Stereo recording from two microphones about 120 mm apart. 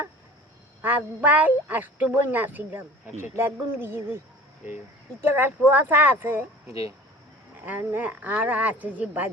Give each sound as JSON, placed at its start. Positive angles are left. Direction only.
{"t": 0.8, "sound": "speech", "side_deg": -15}
{"t": 5.2, "sound": "speech", "side_deg": -15}
{"t": 7.6, "sound": "speech", "side_deg": -15}